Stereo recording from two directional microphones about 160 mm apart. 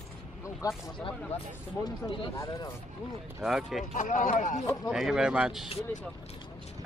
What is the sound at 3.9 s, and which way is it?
Speech, 50° left (ahead or behind).